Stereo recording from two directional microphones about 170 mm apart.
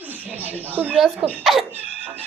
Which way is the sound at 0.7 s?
10° right (ahead or behind).